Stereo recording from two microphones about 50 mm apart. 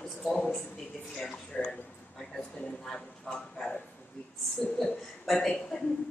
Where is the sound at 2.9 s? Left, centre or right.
Centre.